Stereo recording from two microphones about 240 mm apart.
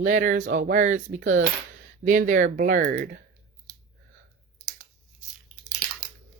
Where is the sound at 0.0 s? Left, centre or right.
Right.